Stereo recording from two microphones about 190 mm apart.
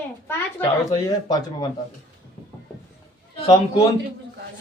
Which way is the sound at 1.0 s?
20° left (ahead or behind).